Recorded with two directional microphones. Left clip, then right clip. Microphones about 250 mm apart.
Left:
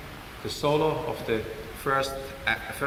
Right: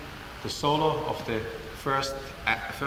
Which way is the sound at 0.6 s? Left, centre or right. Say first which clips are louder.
Left 1 dB; right.